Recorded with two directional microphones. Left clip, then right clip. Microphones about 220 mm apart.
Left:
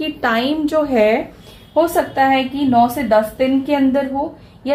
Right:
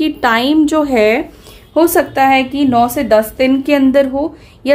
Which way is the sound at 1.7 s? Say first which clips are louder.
Right 4 dB; 50° right (ahead or behind).